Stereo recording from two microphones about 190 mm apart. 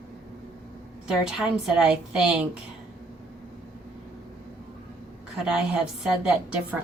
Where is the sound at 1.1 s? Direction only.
5° right (ahead or behind).